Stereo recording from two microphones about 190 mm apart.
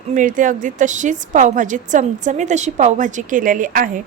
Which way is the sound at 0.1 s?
45° right (ahead or behind).